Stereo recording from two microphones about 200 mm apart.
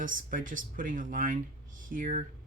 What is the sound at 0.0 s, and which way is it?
Speech, 40° right (ahead or behind).